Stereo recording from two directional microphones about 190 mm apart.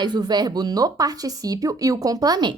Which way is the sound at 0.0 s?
20° right (ahead or behind).